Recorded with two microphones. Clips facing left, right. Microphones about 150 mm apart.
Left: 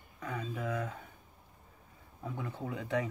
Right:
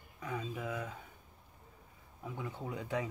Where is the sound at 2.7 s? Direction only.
15° right (ahead or behind).